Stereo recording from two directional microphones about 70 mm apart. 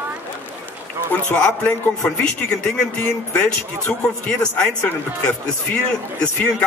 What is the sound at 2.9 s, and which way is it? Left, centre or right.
A man's voice, centre.